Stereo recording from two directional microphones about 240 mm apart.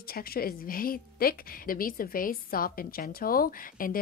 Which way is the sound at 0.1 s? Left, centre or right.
Left.